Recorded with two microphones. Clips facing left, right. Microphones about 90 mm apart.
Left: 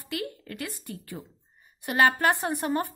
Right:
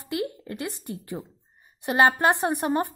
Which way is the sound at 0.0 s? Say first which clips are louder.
Right 4 dB; 20° right (ahead or behind).